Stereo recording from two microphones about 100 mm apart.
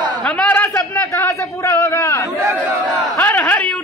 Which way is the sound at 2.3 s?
25° right (ahead or behind).